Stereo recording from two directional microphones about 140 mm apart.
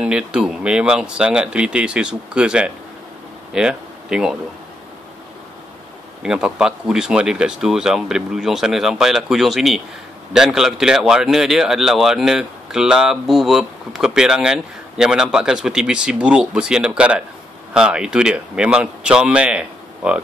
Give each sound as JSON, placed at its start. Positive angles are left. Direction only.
{"t": 0.0, "sound": "speech", "side_deg": -5}
{"t": 6.2, "sound": "speech", "side_deg": -5}